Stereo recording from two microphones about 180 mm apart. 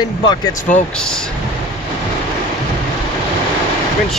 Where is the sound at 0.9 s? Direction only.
5° left (ahead or behind).